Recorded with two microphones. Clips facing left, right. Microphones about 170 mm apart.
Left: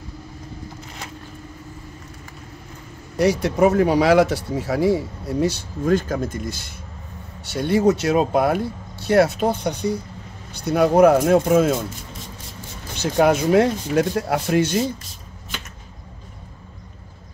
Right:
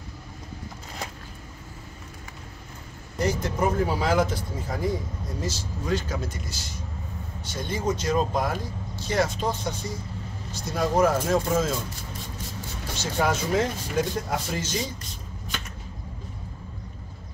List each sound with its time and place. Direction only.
3.2 s speech: 75° left (ahead or behind); by 6.8 s 55° left (ahead or behind)
7.4 s speech: 70° left (ahead or behind)
12.9 s speech: 60° left (ahead or behind)